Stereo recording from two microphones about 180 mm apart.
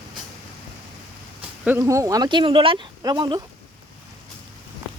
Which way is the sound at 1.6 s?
15° right (ahead or behind).